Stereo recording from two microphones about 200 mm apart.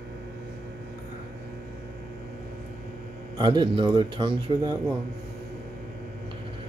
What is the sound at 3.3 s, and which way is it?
A man's voice, 20° right (ahead or behind).